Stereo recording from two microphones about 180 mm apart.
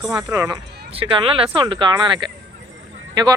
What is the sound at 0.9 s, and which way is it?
Speech, 30° right (ahead or behind).